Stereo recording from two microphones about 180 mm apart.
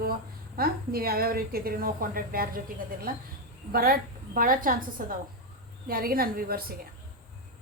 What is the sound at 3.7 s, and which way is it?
A woman's voice, 55° right (ahead or behind).